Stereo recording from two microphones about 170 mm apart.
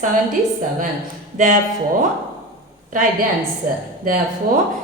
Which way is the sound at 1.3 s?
50° right (ahead or behind).